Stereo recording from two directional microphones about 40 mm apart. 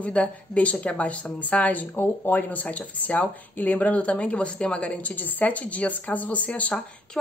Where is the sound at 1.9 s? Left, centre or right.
Left.